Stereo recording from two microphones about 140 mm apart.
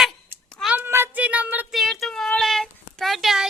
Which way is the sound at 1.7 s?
Centre (ahead or behind).